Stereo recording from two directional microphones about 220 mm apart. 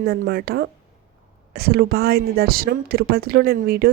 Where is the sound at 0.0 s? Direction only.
45° right (ahead or behind).